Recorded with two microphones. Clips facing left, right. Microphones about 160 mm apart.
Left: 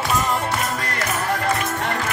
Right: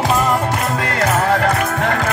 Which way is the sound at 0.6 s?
85° right.